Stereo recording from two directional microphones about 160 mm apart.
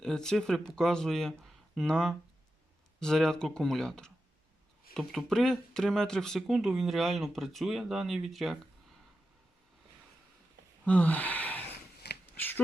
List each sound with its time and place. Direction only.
0.0 s speech: 5° left (ahead or behind)
10.8 s speech: 10° left (ahead or behind)
12.2 s a sound: 10° left (ahead or behind)